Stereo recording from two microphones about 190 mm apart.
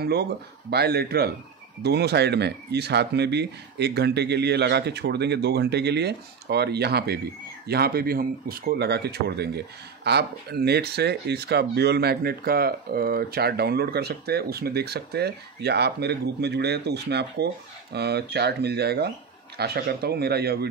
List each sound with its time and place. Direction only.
0.0 s speech: 55° right (ahead or behind)